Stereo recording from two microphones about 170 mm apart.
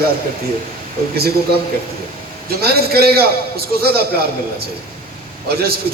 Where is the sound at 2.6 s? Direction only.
65° right (ahead or behind).